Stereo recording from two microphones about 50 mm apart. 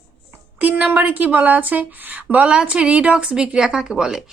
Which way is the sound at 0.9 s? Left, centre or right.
Right.